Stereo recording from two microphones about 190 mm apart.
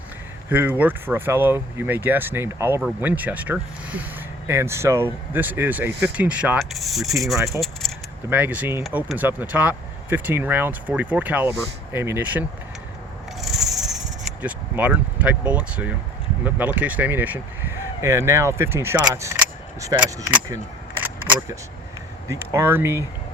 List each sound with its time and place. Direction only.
0.5 s speech: 10° right (ahead or behind)
7.3 s speech: 15° right (ahead or behind)
7.6 s keys jangling: centre (ahead or behind)
8.3 s speech: 10° right (ahead or behind)
13.4 s a sound: centre (ahead or behind)
14.4 s speech: 10° right (ahead or behind)
21.0 s single-lens reflex camera: 10° right (ahead or behind)
22.3 s speech: 15° right (ahead or behind)